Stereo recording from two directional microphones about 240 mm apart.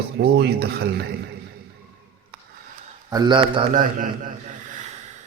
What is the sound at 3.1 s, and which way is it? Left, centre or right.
Speech, centre.